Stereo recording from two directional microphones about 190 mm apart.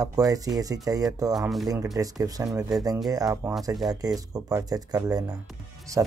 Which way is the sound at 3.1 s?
20° right (ahead or behind).